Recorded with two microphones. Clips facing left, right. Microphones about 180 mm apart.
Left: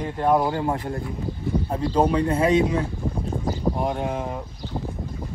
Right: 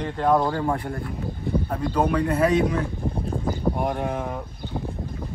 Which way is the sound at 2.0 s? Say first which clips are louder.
Left 1 dB; 30° left (ahead or behind).